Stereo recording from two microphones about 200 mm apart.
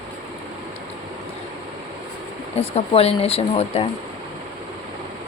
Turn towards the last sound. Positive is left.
turn(degrees=30)  # may be behind; listen again after turning